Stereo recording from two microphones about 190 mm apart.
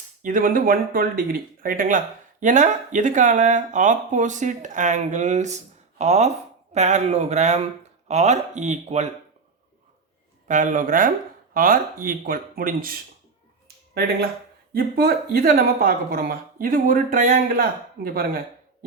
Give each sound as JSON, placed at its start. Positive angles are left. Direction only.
{"t": 0.2, "sound": "speech", "side_deg": -45}
{"t": 10.5, "sound": "speech", "side_deg": -45}
{"t": 14.7, "sound": "speech", "side_deg": -50}